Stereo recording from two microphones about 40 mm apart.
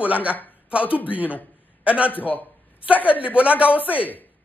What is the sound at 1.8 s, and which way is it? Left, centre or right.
Speech, right.